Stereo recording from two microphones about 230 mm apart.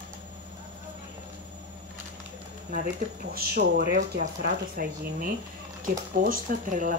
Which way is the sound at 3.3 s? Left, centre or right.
Right.